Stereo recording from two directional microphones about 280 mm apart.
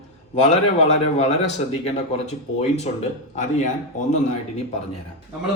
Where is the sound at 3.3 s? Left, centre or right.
Left.